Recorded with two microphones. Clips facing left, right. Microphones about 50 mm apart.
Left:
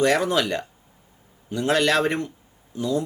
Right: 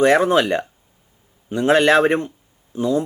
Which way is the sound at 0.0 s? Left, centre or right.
Right.